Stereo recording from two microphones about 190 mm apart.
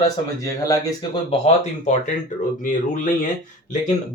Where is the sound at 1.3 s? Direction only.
35° left (ahead or behind).